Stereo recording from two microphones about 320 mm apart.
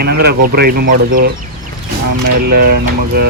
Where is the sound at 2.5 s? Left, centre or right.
Right.